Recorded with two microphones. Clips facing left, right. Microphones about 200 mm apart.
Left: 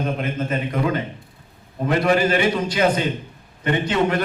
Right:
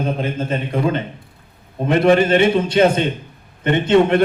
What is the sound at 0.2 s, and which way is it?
A man's voice, 30° right (ahead or behind).